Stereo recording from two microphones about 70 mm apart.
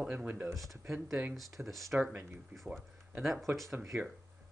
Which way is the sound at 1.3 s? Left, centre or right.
Centre.